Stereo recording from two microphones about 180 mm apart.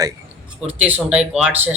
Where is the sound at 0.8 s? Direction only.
10° right (ahead or behind).